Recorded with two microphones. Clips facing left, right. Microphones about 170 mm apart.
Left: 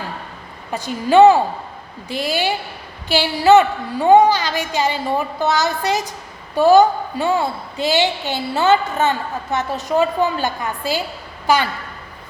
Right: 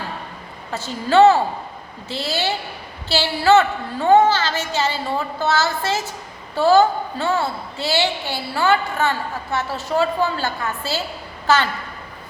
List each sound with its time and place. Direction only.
0.7 s a woman's voice: 15° left (ahead or behind)